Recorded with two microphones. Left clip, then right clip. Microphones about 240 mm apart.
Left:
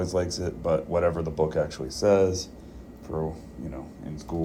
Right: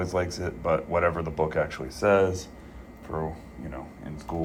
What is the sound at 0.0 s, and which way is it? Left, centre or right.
Speech, centre.